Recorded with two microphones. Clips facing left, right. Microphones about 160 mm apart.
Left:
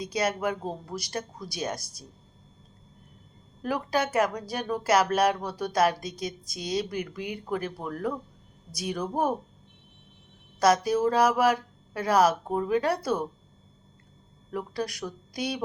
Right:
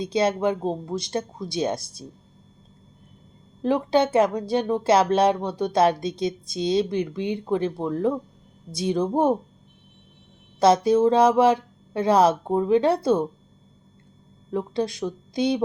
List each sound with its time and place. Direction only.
0.0 s speech: 25° right (ahead or behind)
3.6 s speech: 25° right (ahead or behind)
10.6 s speech: 25° right (ahead or behind)
14.5 s speech: 25° right (ahead or behind)